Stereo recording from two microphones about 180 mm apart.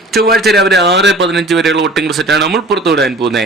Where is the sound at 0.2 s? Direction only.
60° right (ahead or behind).